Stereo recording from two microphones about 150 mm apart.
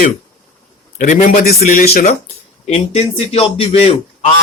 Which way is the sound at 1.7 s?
75° left (ahead or behind).